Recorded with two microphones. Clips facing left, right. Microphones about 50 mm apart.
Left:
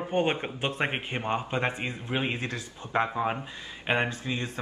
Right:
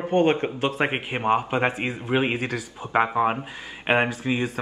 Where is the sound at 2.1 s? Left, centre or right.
Right.